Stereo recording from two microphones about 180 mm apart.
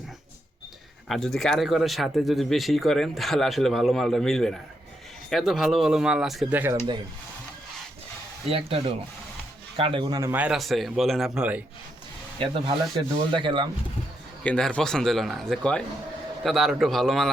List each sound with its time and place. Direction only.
1.0 s speech: centre (ahead or behind)
8.4 s speech: 30° right (ahead or behind)
10.3 s speech: 5° right (ahead or behind)
12.4 s speech: 30° right (ahead or behind)
14.4 s speech: 5° left (ahead or behind)